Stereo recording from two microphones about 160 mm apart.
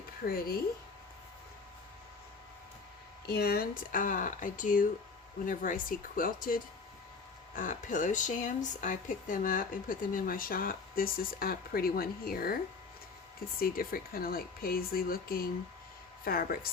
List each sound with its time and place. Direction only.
0.3 s speech: 70° left (ahead or behind)
3.2 s speech: 75° left (ahead or behind)
13.6 s speech: 65° left (ahead or behind)